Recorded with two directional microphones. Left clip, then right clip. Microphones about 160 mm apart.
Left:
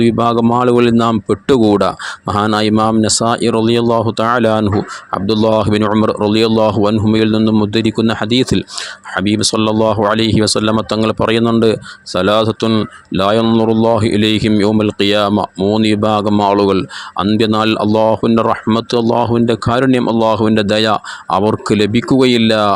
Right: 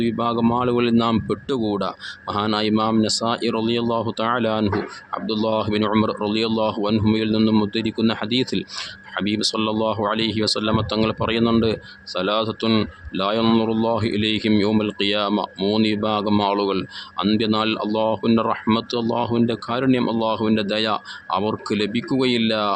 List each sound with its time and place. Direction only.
0.0 s speech: 45° left (ahead or behind)